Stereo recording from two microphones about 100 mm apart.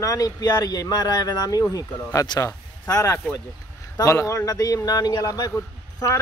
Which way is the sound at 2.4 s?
30° left (ahead or behind).